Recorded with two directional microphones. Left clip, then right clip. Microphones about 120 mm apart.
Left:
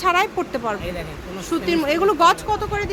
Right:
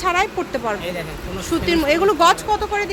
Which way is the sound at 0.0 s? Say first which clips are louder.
Even; 20° left (ahead or behind).